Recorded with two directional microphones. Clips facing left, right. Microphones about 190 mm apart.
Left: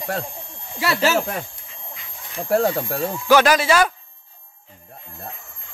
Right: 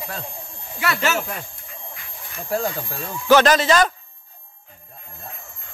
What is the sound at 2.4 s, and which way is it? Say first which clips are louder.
Speech: left 6 dB; 65° left (ahead or behind).